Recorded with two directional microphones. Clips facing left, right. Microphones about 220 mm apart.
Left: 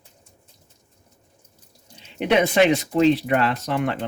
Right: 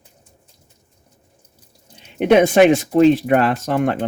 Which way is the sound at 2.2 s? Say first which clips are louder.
Right 6 dB; 50° right (ahead or behind).